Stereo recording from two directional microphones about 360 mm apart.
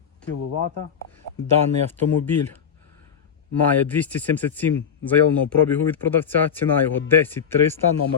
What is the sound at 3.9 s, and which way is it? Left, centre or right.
Speech, centre.